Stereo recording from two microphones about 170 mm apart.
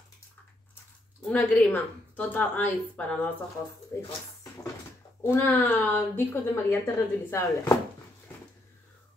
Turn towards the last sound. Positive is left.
turn(degrees=15)  # may be behind; listen again after turning